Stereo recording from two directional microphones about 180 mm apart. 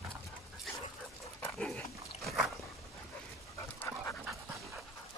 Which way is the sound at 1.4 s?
5° left (ahead or behind).